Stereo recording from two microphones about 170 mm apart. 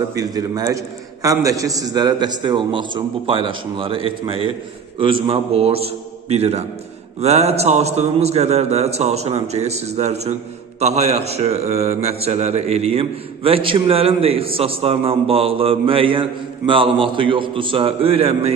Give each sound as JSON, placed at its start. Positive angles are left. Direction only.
{"t": 0.1, "sound": "a man's voice", "side_deg": -20}